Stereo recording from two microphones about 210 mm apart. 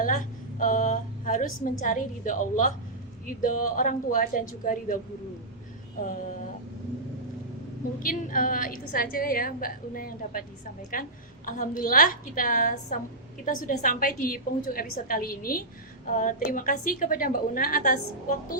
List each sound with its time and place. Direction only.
0.6 s a woman's voice: 35° left (ahead or behind)
7.9 s a woman's voice: 40° left (ahead or behind)